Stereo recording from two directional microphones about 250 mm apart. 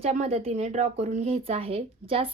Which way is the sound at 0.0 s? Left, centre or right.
Right.